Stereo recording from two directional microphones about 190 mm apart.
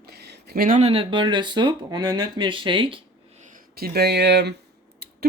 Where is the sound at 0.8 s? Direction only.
30° right (ahead or behind).